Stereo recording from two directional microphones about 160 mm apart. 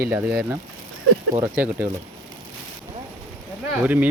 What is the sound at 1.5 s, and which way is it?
Speech, 10° right (ahead or behind).